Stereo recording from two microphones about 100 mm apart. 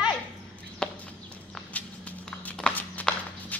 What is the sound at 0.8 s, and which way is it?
Clip-clop, 10° left (ahead or behind).